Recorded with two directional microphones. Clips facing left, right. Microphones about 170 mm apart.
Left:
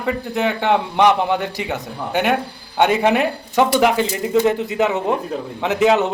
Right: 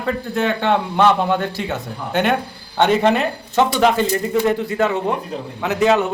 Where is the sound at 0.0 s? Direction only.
15° left (ahead or behind).